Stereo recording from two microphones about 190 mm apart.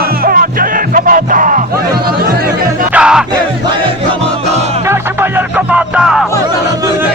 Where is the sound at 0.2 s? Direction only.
50° right (ahead or behind).